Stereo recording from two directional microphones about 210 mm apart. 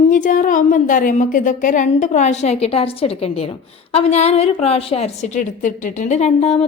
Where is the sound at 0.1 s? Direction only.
40° left (ahead or behind).